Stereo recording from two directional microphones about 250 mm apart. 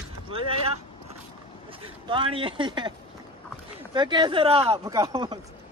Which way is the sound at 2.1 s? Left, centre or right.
Centre.